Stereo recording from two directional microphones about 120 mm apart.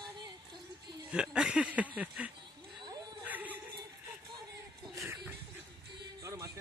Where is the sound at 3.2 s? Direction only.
15° right (ahead or behind).